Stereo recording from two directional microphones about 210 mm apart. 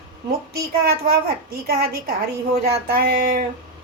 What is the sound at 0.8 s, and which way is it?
Female singing, 50° right (ahead or behind).